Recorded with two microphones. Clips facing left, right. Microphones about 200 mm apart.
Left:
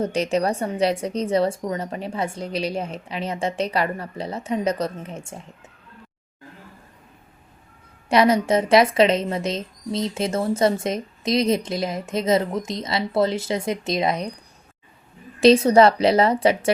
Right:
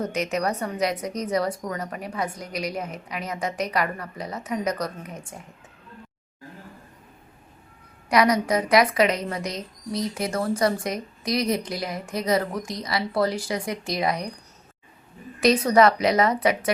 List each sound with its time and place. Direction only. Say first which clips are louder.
0.0 s a woman's voice: left 4 dB; 30° left (ahead or behind)
8.1 s a woman's voice: left 3 dB; 25° left (ahead or behind)
15.4 s a woman's voice: left 5 dB; 25° left (ahead or behind)